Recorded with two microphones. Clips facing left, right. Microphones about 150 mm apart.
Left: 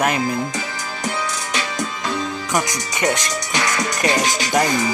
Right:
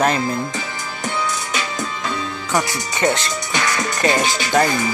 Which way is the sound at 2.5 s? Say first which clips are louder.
Right 2 dB; 15° left (ahead or behind).